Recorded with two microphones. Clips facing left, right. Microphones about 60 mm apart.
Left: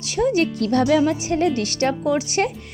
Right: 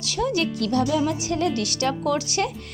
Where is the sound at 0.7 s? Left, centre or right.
Left.